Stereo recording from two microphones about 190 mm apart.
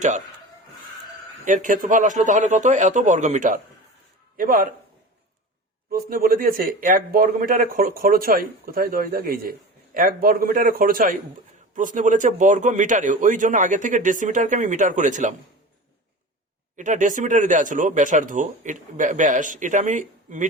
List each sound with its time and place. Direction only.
1.5 s speech: 40° right (ahead or behind)
5.9 s speech: 50° right (ahead or behind)
16.7 s speech: 40° right (ahead or behind)